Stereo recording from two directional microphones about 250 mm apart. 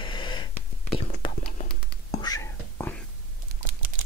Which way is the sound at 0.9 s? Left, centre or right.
Left.